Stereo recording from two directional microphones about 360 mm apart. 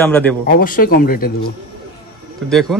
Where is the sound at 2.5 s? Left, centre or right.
Centre.